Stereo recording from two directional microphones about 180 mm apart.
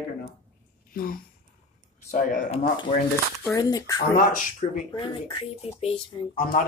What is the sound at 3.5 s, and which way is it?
Speech, 20° left (ahead or behind).